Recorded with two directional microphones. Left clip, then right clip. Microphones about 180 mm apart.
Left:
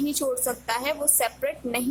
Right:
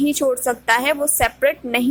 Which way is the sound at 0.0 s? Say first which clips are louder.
Right 8 dB; 20° right (ahead or behind).